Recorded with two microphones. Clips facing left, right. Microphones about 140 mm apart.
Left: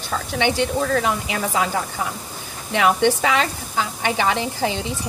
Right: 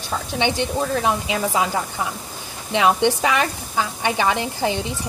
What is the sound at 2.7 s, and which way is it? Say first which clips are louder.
Speech: even; 20° right (ahead or behind).